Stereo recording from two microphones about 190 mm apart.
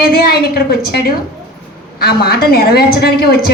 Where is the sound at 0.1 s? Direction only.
55° left (ahead or behind).